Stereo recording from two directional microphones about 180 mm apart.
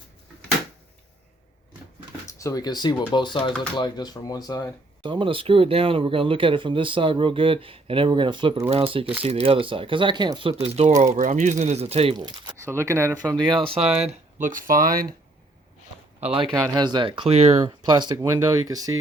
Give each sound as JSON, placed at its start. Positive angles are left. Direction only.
{"t": 2.2, "sound": "speech", "side_deg": 15}
{"t": 5.0, "sound": "speech", "side_deg": -30}
{"t": 12.6, "sound": "speech", "side_deg": -15}
{"t": 13.3, "sound": "speech", "side_deg": -25}
{"t": 13.8, "sound": "speech", "side_deg": -5}
{"t": 14.4, "sound": "speech", "side_deg": -50}
{"t": 16.2, "sound": "speech", "side_deg": -30}
{"t": 17.8, "sound": "speech", "side_deg": -25}